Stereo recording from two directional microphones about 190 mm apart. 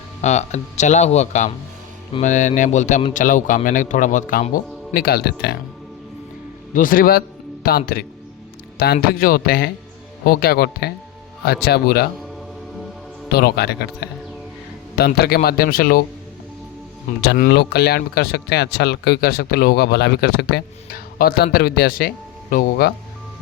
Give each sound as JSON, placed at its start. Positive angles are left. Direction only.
{"t": 0.2, "sound": "a man's voice", "side_deg": 35}
{"t": 6.7, "sound": "a man's voice", "side_deg": 45}
{"t": 13.3, "sound": "a man's voice", "side_deg": 55}
{"t": 17.2, "sound": "a man's voice", "side_deg": 45}
{"t": 17.5, "sound": "speech", "side_deg": 60}